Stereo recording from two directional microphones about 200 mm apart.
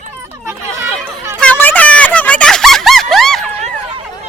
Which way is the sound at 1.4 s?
5° left (ahead or behind).